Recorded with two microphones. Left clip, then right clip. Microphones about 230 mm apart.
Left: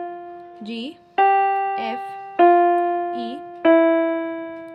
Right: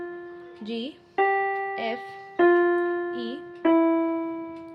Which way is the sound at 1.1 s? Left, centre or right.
Left.